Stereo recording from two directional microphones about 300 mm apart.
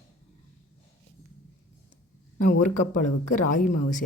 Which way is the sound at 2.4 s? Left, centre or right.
Left.